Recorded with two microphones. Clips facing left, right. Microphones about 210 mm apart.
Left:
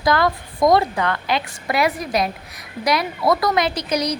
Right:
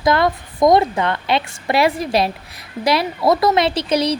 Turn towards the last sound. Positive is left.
turn(degrees=-25)  # may be behind; listen again after turning